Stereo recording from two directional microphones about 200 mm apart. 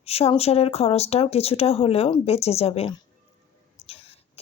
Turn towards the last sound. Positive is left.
turn(degrees=30)  # may be behind; listen again after turning